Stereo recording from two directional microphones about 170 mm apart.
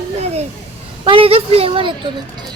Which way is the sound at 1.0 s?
30° right (ahead or behind).